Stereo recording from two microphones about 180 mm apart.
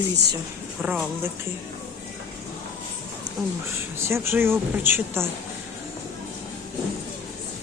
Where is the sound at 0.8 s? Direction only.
5° right (ahead or behind).